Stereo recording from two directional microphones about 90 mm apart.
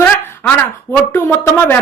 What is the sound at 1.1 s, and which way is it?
Speech, 25° left (ahead or behind).